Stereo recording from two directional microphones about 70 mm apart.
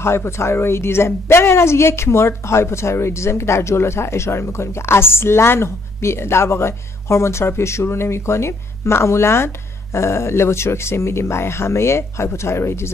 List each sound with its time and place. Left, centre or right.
0.0 s a woman's voice: left